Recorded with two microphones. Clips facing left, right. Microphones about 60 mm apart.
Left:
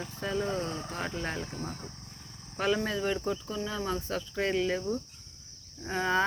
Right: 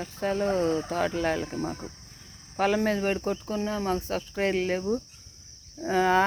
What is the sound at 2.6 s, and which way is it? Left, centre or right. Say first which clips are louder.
Speech: right 5 dB; right.